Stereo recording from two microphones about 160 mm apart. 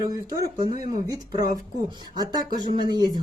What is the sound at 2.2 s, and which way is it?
Speech, 25° right (ahead or behind).